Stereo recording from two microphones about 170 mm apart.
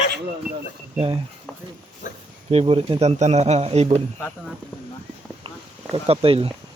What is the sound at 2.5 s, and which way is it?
Speech, 35° right (ahead or behind).